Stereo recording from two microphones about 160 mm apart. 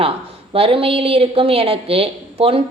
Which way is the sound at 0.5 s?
35° right (ahead or behind).